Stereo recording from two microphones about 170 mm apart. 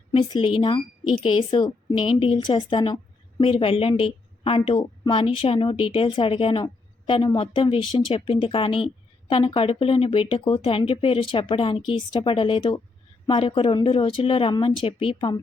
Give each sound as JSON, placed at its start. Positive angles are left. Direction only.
{"t": 0.1, "sound": "speech", "side_deg": 30}